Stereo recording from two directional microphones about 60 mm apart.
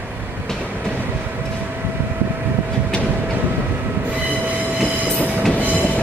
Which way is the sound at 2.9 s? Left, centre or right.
Centre.